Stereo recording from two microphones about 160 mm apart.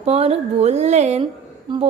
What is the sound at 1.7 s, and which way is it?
Speech, 30° right (ahead or behind).